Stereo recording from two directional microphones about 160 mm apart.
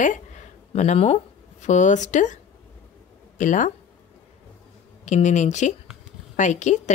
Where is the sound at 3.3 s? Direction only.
50° left (ahead or behind).